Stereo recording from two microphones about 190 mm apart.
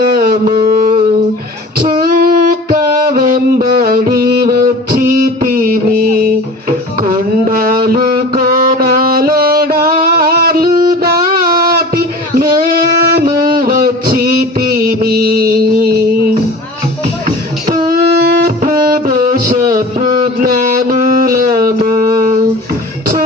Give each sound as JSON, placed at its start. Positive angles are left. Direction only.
{"t": 0.0, "sound": "a sound", "side_deg": -50}
{"t": 12.4, "sound": "singing", "side_deg": -50}
{"t": 13.3, "sound": "music", "side_deg": -50}